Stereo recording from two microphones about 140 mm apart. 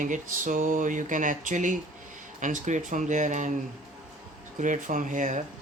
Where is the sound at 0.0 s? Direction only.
65° right (ahead or behind).